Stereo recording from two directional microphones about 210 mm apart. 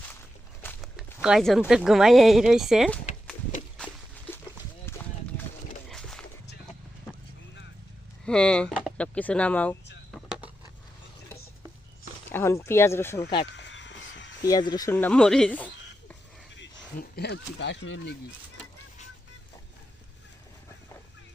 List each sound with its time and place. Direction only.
0.9 s speech: centre (ahead or behind)
4.9 s run: 10° left (ahead or behind)
5.9 s dog: 5° left (ahead or behind)
8.2 s speech: 5° left (ahead or behind)
12.3 s speech: 10° left (ahead or behind)
13.5 s crow: 60° left (ahead or behind)
14.4 s speech: 20° left (ahead or behind)
14.9 s speech: 5° left (ahead or behind)
17.0 s speech: 50° left (ahead or behind)